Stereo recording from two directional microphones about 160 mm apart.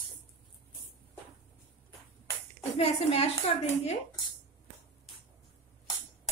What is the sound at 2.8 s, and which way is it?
Speech, 40° left (ahead or behind).